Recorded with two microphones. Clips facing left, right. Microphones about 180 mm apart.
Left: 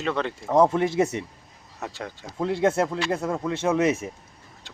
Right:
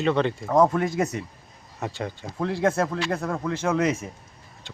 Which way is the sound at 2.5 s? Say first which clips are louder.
Left 1 dB; 20° left (ahead or behind).